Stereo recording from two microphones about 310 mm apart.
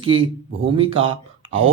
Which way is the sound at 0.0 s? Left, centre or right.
Centre.